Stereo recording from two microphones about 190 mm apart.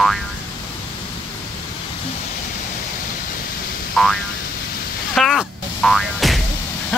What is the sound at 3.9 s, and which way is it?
Boing, centre (ahead or behind).